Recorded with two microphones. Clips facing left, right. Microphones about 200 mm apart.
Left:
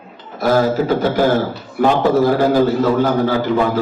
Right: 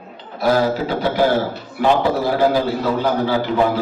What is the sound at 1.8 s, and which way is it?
A man's voice, 45° left (ahead or behind).